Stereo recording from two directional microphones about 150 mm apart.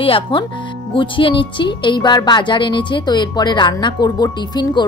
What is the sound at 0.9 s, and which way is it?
A woman's voice, 35° left (ahead or behind).